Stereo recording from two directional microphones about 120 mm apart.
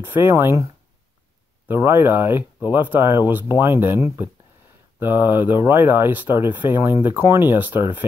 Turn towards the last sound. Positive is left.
turn(degrees=-15)  # may be behind; listen again after turning